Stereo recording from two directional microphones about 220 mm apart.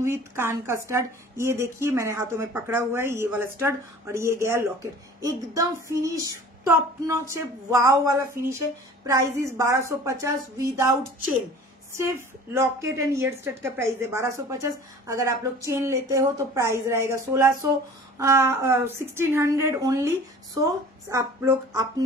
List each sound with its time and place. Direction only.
0.0 s speech: 10° right (ahead or behind)
12.5 s speech: 15° right (ahead or behind)